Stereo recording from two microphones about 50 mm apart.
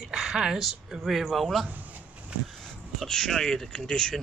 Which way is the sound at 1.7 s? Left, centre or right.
Right.